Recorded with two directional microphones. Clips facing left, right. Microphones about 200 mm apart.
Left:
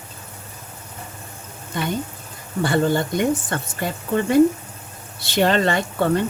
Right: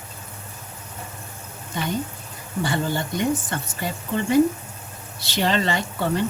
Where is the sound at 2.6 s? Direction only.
55° left (ahead or behind).